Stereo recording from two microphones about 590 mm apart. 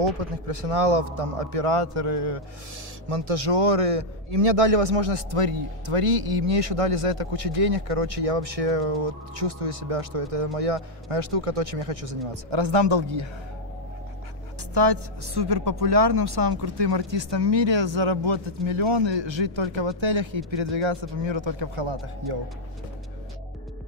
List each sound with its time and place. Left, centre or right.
0.0 s a man's voice: right
14.7 s speech: right